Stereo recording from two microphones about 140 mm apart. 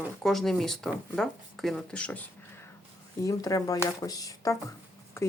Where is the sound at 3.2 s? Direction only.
25° left (ahead or behind).